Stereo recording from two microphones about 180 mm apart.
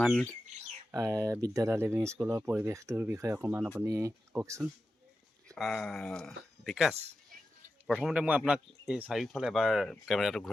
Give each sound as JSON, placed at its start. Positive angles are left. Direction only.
{"t": 0.0, "sound": "speech", "side_deg": 5}
{"t": 0.9, "sound": "speech", "side_deg": -15}
{"t": 5.5, "sound": "speech", "side_deg": 0}